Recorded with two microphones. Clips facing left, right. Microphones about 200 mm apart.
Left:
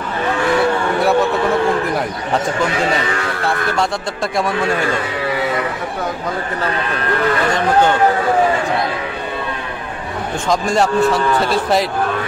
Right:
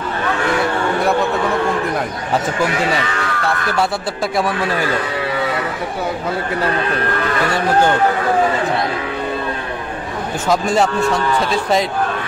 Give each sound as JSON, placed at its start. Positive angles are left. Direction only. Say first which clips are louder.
{"t": 10.5, "sound": "a man's voice", "louder": "even", "side_deg": 0}